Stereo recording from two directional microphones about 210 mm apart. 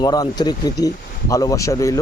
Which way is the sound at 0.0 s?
20° left (ahead or behind).